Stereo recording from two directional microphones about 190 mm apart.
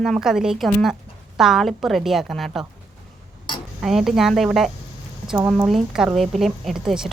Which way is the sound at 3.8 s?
Centre (ahead or behind).